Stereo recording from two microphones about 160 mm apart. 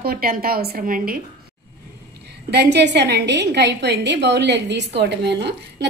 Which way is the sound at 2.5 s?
90° right.